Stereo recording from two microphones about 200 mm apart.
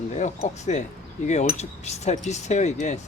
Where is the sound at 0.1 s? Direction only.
35° left (ahead or behind).